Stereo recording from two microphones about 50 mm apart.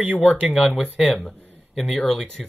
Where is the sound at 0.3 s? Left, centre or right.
Centre.